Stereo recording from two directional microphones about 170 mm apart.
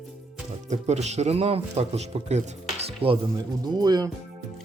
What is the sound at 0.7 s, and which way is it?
Speech, 40° right (ahead or behind).